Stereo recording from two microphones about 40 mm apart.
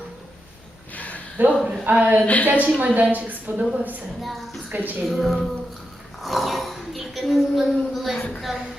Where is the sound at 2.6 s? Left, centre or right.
Right.